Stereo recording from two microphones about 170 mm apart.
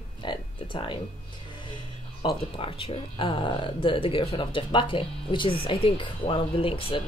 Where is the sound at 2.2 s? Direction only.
30° left (ahead or behind).